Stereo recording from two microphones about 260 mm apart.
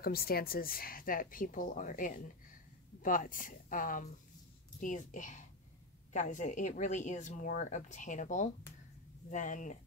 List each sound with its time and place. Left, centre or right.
0.0 s speech: left